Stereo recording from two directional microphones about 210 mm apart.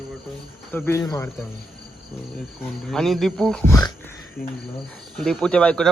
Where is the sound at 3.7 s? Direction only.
15° left (ahead or behind).